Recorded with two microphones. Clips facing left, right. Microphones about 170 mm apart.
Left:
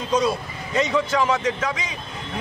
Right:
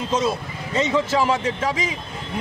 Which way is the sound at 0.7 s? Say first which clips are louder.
Right 1 dB; 30° right (ahead or behind).